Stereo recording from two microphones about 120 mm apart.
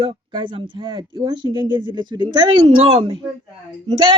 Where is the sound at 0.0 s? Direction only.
45° right (ahead or behind).